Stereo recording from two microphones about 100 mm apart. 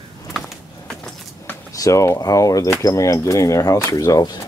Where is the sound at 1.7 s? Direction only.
30° left (ahead or behind).